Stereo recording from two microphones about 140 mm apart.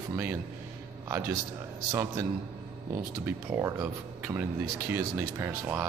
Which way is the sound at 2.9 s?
10° right (ahead or behind).